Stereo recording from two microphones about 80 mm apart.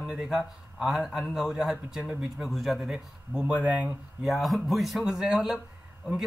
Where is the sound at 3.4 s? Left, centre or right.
Centre.